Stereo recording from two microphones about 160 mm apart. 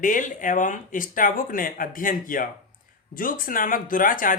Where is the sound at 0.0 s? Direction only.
55° left (ahead or behind).